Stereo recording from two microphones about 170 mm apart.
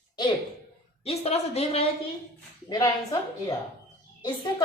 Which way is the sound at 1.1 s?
35° left (ahead or behind).